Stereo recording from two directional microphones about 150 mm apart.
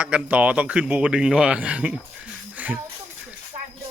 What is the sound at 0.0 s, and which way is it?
Speech, 10° right (ahead or behind).